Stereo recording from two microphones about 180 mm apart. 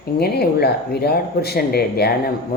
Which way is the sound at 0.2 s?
60° left (ahead or behind).